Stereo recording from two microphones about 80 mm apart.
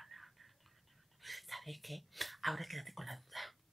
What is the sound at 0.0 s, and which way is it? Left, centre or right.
Whispering, centre.